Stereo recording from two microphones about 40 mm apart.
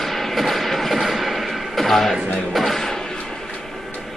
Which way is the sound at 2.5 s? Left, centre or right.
Centre.